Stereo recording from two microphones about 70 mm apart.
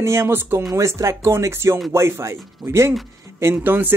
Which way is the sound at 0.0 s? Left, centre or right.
Right.